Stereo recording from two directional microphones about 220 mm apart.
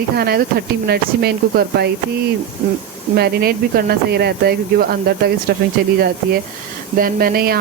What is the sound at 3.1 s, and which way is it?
Speech, 45° right (ahead or behind).